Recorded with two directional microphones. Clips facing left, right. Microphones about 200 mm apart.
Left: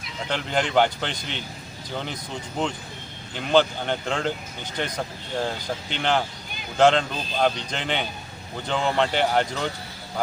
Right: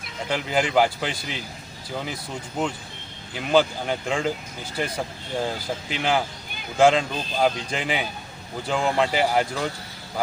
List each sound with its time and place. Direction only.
0.3 s speech: 5° right (ahead or behind)